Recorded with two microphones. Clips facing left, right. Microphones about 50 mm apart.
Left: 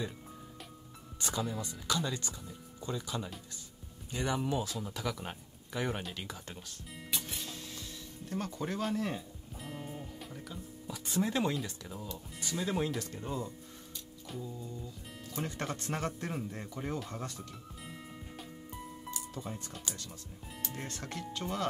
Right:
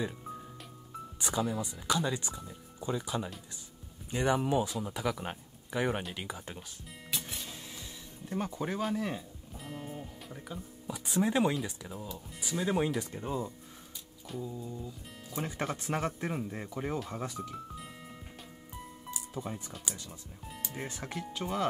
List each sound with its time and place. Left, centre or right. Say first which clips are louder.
1.2 s speech: right 3 dB; centre
6.9 s music: even; centre
7.5 s speech: left 1 dB; centre
10.5 s speech: right 3 dB; centre
14.2 s music: right 3 dB; centre
14.5 s speech: right 3 dB; centre
15.0 s music: left 1 dB; centre
15.3 s speech: right 2 dB; centre
17.7 s music: right 1 dB; centre
19.0 s music: right 3 dB; centre
20.4 s speech: right 2 dB; centre